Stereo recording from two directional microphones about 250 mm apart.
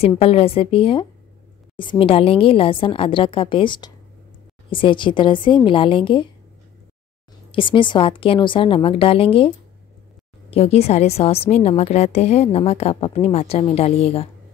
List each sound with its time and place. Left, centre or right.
0.0 s a woman's voice: left
7.5 s a woman's voice: centre
10.5 s a woman's voice: left